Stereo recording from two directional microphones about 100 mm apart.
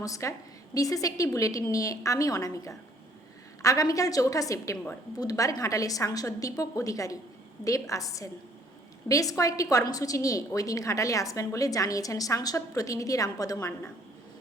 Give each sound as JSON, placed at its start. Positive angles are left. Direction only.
{"t": 0.0, "sound": "a woman's voice", "side_deg": 35}